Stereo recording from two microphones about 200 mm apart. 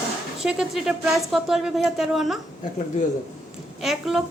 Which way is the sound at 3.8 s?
Centre (ahead or behind).